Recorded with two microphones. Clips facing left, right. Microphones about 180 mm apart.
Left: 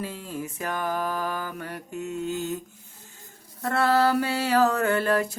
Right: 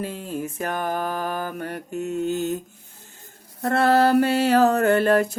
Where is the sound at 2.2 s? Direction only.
65° right (ahead or behind).